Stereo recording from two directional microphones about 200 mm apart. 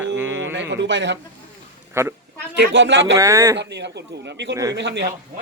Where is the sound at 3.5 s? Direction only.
60° right (ahead or behind).